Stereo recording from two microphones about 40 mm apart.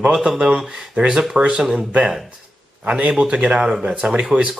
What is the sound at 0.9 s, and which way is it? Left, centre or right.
Speech, right.